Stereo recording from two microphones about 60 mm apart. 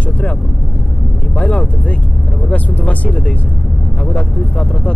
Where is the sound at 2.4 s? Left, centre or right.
Left.